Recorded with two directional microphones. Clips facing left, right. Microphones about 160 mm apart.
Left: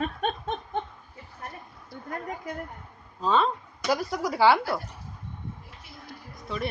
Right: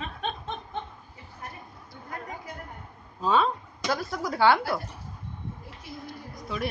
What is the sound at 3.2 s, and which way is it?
Speech, 5° right (ahead or behind).